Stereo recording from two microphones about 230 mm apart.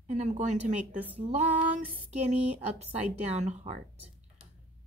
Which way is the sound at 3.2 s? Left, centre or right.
Right.